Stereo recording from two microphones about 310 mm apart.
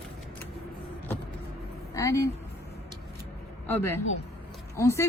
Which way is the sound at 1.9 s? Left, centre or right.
Centre.